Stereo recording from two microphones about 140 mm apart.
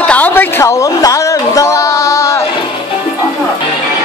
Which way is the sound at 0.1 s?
10° left (ahead or behind).